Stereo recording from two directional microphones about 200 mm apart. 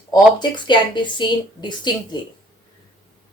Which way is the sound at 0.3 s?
20° left (ahead or behind).